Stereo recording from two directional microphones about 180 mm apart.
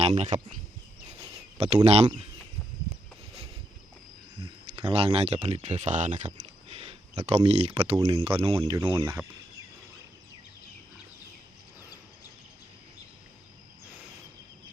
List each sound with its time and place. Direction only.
0.0 s speech: 40° right (ahead or behind)
1.2 s a sound: 35° right (ahead or behind)
4.4 s speech: 30° right (ahead or behind)
8.7 s speech: 15° right (ahead or behind)